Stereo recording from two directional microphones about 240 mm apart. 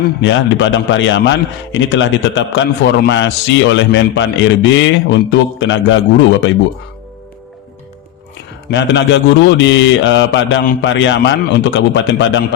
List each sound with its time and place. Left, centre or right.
0.2 s a man's voice: left
8.7 s a man's voice: left